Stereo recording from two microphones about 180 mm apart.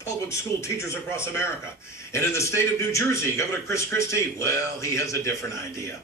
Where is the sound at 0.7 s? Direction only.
15° left (ahead or behind).